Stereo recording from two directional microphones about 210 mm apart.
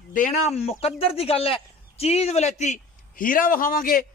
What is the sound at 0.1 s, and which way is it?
A man's voice, 35° left (ahead or behind).